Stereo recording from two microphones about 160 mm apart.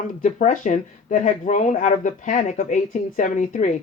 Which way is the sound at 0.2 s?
50° left (ahead or behind).